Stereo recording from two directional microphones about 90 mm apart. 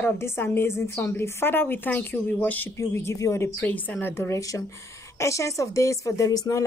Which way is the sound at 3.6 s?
20° left (ahead or behind).